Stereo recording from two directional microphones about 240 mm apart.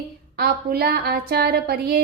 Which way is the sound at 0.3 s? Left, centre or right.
Right.